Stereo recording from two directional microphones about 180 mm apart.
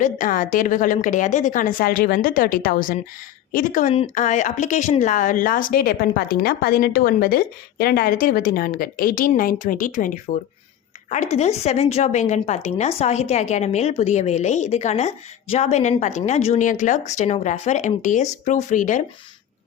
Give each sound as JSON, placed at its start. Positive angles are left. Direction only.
{"t": 0.0, "sound": "a woman's voice", "side_deg": 45}